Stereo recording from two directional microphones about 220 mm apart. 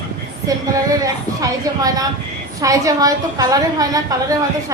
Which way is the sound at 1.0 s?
15° right (ahead or behind).